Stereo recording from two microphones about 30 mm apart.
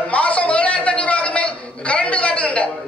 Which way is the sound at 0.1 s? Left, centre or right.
Left.